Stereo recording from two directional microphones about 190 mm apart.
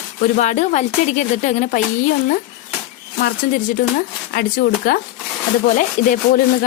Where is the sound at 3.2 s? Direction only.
55° left (ahead or behind).